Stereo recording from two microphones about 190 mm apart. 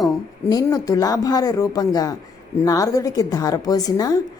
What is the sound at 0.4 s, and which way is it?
A woman's voice, 15° left (ahead or behind).